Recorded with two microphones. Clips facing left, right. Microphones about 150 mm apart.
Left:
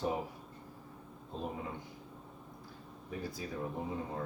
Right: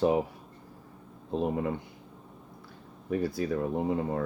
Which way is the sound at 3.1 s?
70° right (ahead or behind).